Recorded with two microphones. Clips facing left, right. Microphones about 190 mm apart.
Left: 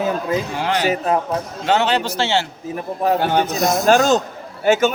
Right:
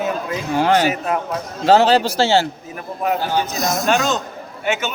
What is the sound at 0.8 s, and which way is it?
Speech, 30° left (ahead or behind).